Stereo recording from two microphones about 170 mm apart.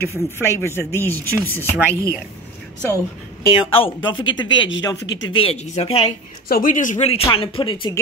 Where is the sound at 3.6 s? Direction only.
30° left (ahead or behind).